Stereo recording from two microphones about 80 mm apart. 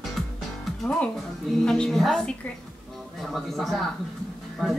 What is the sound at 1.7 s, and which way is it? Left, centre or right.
Speech, centre.